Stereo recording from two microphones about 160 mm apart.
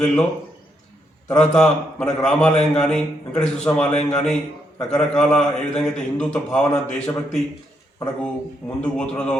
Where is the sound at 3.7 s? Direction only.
15° left (ahead or behind).